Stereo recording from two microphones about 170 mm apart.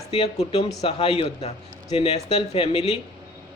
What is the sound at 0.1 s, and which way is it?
Speech, 40° left (ahead or behind).